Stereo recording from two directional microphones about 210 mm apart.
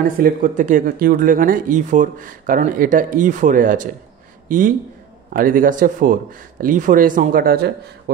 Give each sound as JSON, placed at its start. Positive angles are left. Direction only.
{"t": 0.0, "sound": "speech", "side_deg": -40}